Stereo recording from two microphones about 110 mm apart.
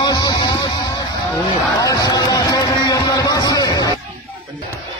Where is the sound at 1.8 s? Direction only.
35° left (ahead or behind).